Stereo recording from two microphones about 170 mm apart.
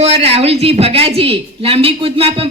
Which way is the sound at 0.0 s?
40° right (ahead or behind).